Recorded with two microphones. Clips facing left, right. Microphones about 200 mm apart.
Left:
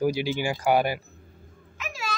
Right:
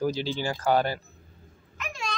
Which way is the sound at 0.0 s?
10° left (ahead or behind).